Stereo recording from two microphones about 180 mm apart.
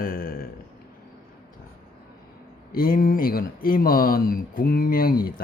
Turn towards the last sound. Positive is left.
turn(degrees=55)  # may be behind; listen again after turning